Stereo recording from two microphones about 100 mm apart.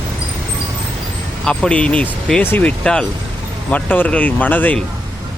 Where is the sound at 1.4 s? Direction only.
10° left (ahead or behind).